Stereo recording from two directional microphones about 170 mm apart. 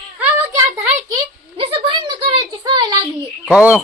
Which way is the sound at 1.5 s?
30° right (ahead or behind).